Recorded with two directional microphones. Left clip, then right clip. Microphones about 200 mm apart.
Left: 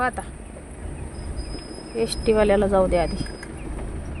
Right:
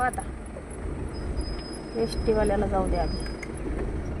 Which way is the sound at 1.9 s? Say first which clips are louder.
Left 5 dB; 55° left (ahead or behind).